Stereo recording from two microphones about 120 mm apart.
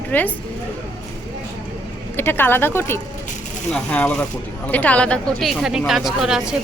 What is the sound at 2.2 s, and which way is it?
A woman's voice, 15° left (ahead or behind).